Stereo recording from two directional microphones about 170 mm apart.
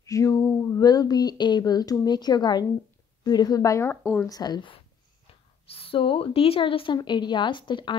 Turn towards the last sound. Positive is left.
turn(degrees=30)  # may be behind; listen again after turning